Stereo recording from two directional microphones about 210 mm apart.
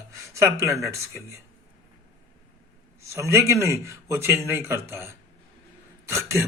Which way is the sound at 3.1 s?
15° right (ahead or behind).